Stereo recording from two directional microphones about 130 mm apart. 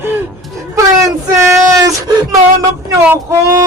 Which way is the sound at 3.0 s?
20° right (ahead or behind).